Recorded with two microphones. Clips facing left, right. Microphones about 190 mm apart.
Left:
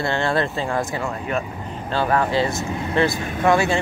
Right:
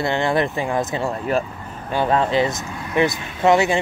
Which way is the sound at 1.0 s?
35° right (ahead or behind).